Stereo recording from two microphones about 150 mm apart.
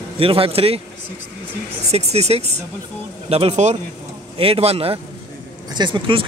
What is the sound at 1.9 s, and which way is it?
Speech, 45° right (ahead or behind).